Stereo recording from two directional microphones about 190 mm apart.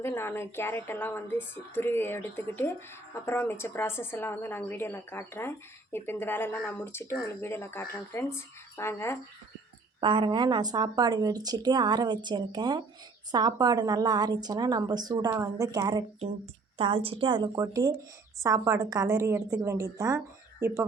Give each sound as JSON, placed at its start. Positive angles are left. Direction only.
{"t": 0.0, "sound": "a woman's voice", "side_deg": 15}
{"t": 10.0, "sound": "a woman's voice", "side_deg": -25}